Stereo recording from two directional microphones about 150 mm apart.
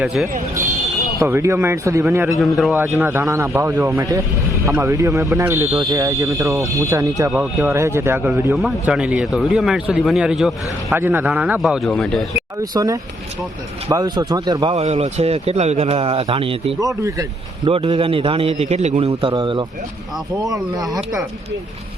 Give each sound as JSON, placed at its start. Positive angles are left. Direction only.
{"t": 0.0, "sound": "a man's voice", "side_deg": -5}
{"t": 1.2, "sound": "a man's voice", "side_deg": -20}
{"t": 2.4, "sound": "a man's voice", "side_deg": 0}
{"t": 3.0, "sound": "a man's voice", "side_deg": -15}
{"t": 10.9, "sound": "a man's voice", "side_deg": -15}
{"t": 12.7, "sound": "a man's voice", "side_deg": -25}
{"t": 14.8, "sound": "speech", "side_deg": -45}
{"t": 16.8, "sound": "a man's voice", "side_deg": -20}
{"t": 17.7, "sound": "a man's voice", "side_deg": -40}